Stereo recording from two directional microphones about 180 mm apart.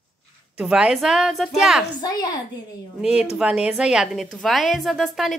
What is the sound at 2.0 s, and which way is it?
Speech, 25° left (ahead or behind).